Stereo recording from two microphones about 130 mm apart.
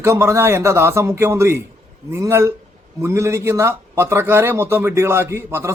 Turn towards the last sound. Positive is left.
turn(degrees=-20)  # may be behind; listen again after turning